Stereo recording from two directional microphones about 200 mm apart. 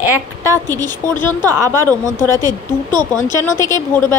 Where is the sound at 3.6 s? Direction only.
15° left (ahead or behind).